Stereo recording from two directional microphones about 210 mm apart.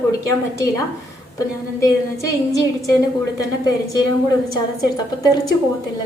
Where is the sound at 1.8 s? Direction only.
15° left (ahead or behind).